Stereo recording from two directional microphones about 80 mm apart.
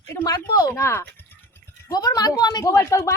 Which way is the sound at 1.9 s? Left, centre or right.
Left.